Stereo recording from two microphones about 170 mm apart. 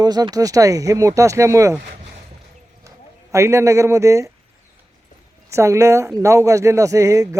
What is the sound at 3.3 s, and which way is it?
Speech, 15° right (ahead or behind).